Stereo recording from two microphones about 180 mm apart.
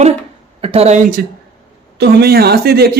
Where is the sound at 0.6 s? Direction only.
35° right (ahead or behind).